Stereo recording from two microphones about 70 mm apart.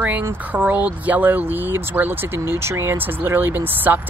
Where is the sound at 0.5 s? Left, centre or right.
Right.